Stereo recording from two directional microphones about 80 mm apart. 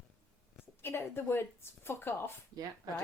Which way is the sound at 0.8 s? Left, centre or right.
Left.